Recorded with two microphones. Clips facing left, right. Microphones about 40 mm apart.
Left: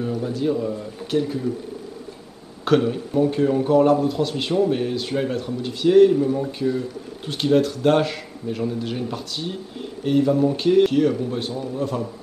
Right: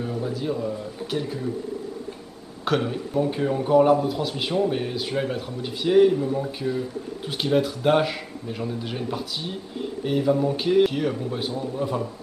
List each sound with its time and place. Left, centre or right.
0.2 s speech: centre
2.6 s speech: centre